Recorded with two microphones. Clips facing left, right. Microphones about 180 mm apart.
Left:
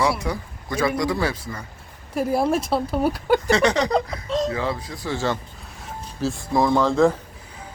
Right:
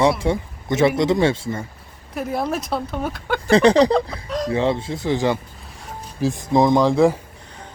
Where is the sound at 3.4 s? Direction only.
35° right (ahead or behind).